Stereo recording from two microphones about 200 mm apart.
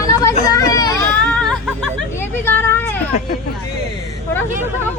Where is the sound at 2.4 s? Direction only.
10° left (ahead or behind).